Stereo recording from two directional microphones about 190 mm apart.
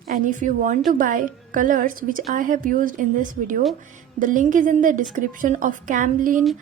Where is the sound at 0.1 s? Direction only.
40° right (ahead or behind).